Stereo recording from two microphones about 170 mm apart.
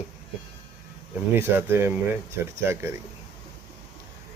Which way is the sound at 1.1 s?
10° right (ahead or behind).